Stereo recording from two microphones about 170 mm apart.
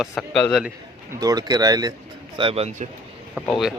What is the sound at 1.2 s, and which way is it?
Speech, 20° right (ahead or behind).